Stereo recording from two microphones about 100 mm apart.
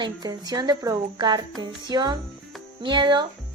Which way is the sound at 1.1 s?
50° right (ahead or behind).